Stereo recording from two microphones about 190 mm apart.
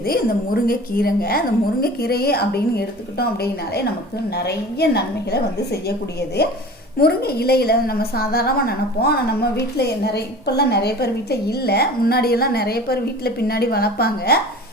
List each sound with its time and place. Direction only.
0.0 s a woman's voice: 55° left (ahead or behind)